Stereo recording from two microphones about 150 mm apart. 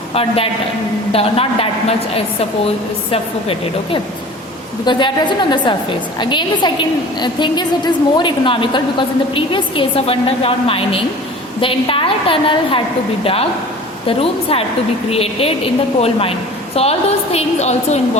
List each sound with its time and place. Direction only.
0.1 s a woman's voice: 40° left (ahead or behind)
14.1 s a woman's voice: 40° left (ahead or behind)